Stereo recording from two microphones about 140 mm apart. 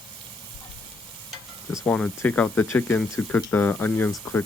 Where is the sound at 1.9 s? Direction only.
10° left (ahead or behind).